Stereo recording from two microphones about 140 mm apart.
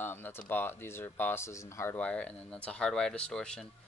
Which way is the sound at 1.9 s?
10° left (ahead or behind).